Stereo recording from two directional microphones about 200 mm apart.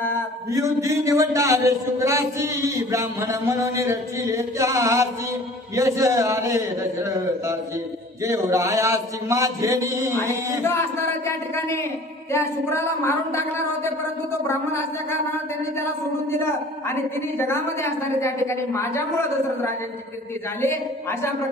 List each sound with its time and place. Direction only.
0.5 s a man's voice: 15° right (ahead or behind)
10.6 s a woman's voice: 10° left (ahead or behind)
20.6 s a woman's voice: 15° left (ahead or behind)